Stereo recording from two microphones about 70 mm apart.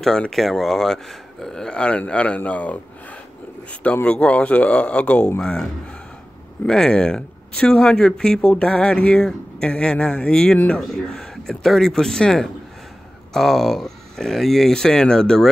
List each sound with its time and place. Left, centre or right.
0.0 s speech: centre
3.8 s speech: centre